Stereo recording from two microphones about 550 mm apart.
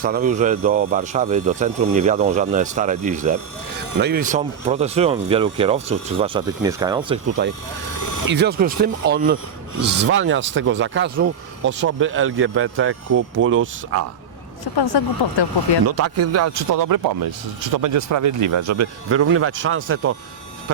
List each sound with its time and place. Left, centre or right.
0.0 s speech: centre
7.9 s vehicle: left
8.3 s speech: centre
14.6 s speech: left
15.9 s speech: right